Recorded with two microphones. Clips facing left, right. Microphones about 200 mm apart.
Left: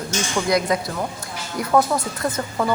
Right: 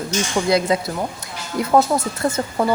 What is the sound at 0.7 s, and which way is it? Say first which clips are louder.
A woman's voice: right 2 dB; 25° right (ahead or behind).